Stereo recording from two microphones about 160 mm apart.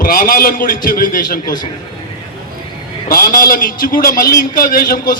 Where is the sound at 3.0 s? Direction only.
65° left (ahead or behind).